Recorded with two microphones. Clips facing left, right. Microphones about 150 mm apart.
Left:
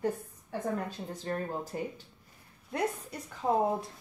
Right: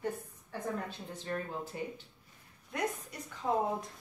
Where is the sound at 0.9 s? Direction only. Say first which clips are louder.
Left 3 dB; 40° left (ahead or behind).